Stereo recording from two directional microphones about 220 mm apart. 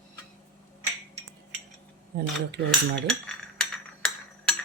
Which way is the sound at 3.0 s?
5° left (ahead or behind).